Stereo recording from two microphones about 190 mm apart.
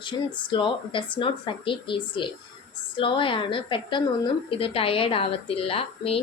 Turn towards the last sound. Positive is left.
turn(degrees=30)  # may be behind; listen again after turning